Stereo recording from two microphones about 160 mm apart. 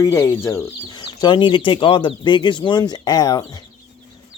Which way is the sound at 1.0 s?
30° left (ahead or behind).